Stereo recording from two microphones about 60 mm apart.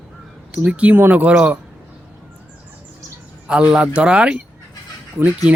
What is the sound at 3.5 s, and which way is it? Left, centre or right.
Speech, centre.